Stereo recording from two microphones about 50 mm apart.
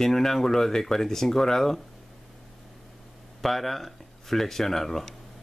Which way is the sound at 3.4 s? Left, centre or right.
Centre.